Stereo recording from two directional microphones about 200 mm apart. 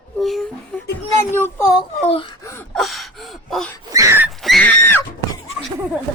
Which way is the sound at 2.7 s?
Centre (ahead or behind).